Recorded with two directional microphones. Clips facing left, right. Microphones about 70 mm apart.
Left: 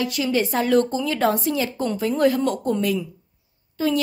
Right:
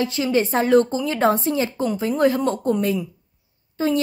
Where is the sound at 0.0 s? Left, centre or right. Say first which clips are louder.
Right 2 dB; right.